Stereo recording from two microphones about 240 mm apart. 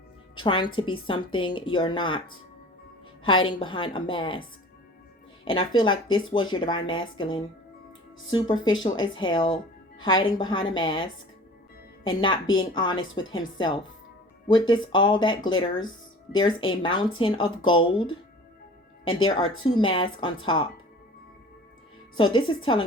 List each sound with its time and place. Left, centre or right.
0.3 s a woman's voice: centre
3.2 s speech: left
5.5 s speech: left
13.0 s a woman's voice: left
13.3 s speech: centre
19.6 s speech: left
22.2 s speech: centre